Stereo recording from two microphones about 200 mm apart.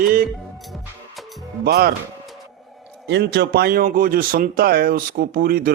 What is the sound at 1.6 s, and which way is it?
Speech, 50° right (ahead or behind).